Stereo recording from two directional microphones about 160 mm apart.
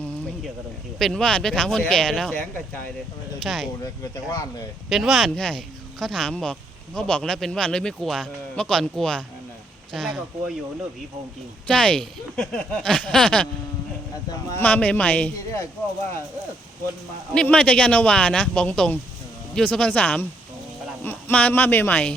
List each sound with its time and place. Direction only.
0.9 s speech: 5° left (ahead or behind)
3.4 s speech: centre (ahead or behind)
4.1 s speech: 25° left (ahead or behind)
4.9 s speech: centre (ahead or behind)
11.7 s speech: 5° left (ahead or behind)
14.6 s a man's voice: 10° left (ahead or behind)
17.3 s a man's voice: 5° left (ahead or behind)